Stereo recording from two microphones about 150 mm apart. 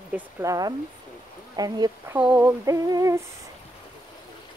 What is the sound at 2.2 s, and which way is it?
Female singing, 10° right (ahead or behind).